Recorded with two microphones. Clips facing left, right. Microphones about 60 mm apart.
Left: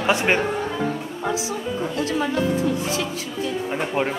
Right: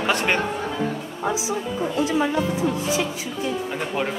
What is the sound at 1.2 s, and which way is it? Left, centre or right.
A woman's voice, centre.